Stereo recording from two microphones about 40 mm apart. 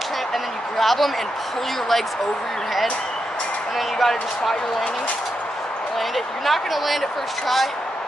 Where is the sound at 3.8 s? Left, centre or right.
Centre.